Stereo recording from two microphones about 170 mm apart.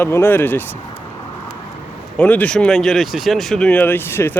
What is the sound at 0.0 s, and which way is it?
Speech, 15° left (ahead or behind).